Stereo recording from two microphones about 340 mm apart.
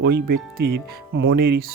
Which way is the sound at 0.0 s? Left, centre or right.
Right.